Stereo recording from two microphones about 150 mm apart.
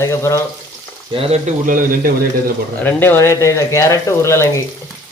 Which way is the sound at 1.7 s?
65° right (ahead or behind).